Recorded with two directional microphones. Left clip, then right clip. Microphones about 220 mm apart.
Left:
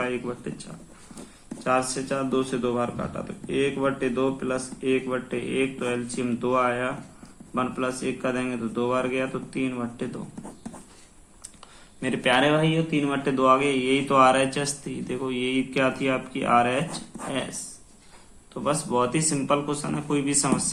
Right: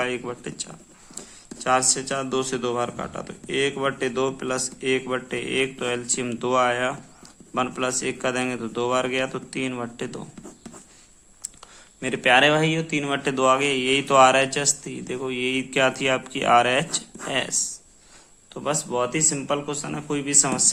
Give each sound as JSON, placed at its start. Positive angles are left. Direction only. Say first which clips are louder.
{"t": 0.0, "sound": "speech", "louder": "right 2 dB", "side_deg": -45}
{"t": 1.6, "sound": "speech", "louder": "right 3 dB", "side_deg": -40}
{"t": 11.9, "sound": "speech", "louder": "right 4 dB", "side_deg": -30}
{"t": 18.5, "sound": "speech", "louder": "left 1 dB", "side_deg": -30}